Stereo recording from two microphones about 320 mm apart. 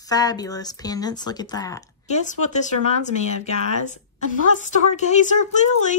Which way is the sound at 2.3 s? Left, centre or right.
Left.